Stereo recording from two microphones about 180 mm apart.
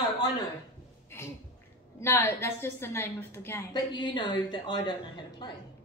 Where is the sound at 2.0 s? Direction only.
15° left (ahead or behind).